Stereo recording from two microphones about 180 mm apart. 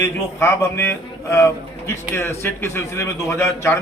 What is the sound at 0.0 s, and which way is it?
A man's voice, 15° left (ahead or behind).